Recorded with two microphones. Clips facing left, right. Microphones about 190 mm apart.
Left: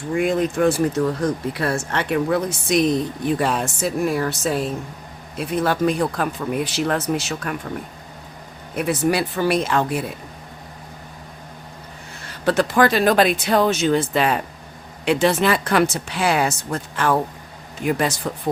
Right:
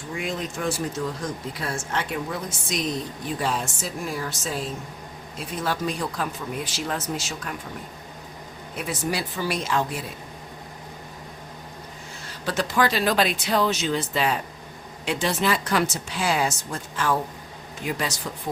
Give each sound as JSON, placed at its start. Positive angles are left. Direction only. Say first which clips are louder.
{"t": 0.1, "sound": "speech", "louder": "left 10 dB", "side_deg": 55}
{"t": 8.7, "sound": "speech", "louder": "left 8 dB", "side_deg": 60}
{"t": 12.5, "sound": "speech", "louder": "left 7 dB", "side_deg": 55}